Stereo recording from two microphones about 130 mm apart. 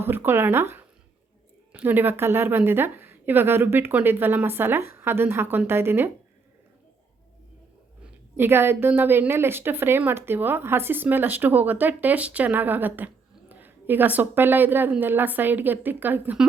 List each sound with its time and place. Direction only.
0.0 s a woman's voice: 15° right (ahead or behind)
8.0 s a woman's voice: 15° right (ahead or behind)